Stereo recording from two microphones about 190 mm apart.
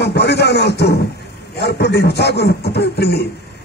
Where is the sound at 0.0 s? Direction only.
60° left (ahead or behind).